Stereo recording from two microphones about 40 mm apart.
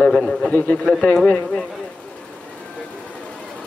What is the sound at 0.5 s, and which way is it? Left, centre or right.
A man's voice, left.